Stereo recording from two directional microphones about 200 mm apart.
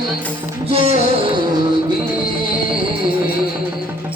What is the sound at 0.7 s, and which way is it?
Music, 30° right (ahead or behind).